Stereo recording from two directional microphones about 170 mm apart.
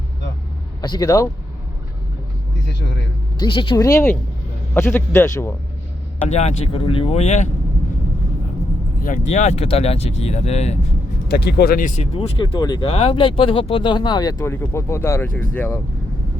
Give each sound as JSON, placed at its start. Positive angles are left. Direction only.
{"t": 0.8, "sound": "speech", "side_deg": 25}
{"t": 2.6, "sound": "speech", "side_deg": 90}
{"t": 3.3, "sound": "speech", "side_deg": 25}
{"t": 6.2, "sound": "speech", "side_deg": 40}
{"t": 9.0, "sound": "speech", "side_deg": 50}
{"t": 11.3, "sound": "speech", "side_deg": 70}
{"t": 11.9, "sound": "speech", "side_deg": 35}